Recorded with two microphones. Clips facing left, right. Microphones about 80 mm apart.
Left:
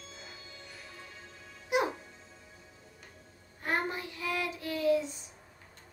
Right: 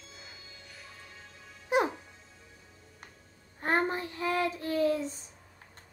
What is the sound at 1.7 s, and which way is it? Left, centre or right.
Music, right.